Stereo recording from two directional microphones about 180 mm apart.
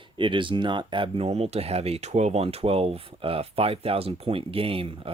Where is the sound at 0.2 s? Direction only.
25° right (ahead or behind).